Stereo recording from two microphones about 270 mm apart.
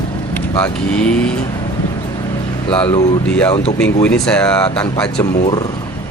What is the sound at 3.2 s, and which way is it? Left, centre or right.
Speech, centre.